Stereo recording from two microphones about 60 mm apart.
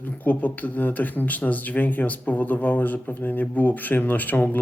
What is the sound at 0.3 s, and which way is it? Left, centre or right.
Speech, left.